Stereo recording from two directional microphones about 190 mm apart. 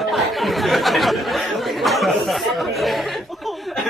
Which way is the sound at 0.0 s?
Centre (ahead or behind).